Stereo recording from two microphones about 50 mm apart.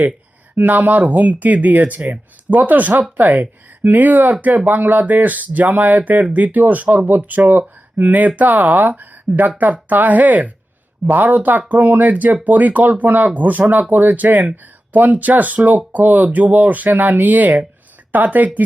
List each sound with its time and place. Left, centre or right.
0.5 s speech: right